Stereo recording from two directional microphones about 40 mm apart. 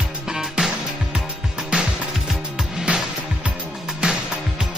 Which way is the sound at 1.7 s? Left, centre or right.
Right.